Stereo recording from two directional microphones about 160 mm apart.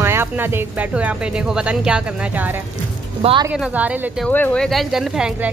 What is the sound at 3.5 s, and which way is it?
Speech, 5° right (ahead or behind).